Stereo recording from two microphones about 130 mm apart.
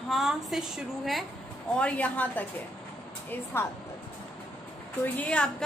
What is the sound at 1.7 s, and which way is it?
Speech, 10° left (ahead or behind).